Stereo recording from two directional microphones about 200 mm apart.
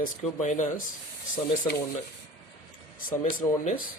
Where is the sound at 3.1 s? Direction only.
40° left (ahead or behind).